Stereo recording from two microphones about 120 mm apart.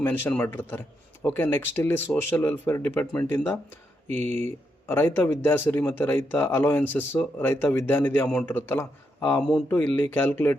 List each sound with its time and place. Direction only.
0.0 s speech: 15° left (ahead or behind)